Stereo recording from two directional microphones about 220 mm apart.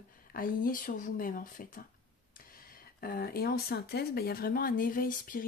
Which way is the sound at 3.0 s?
40° left (ahead or behind).